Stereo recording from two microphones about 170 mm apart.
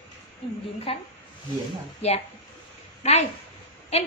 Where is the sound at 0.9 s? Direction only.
35° left (ahead or behind).